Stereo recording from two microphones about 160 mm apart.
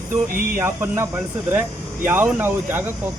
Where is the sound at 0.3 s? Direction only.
60° right (ahead or behind).